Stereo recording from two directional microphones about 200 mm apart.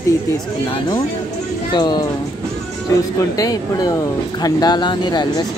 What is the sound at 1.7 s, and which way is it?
Speech, 20° left (ahead or behind).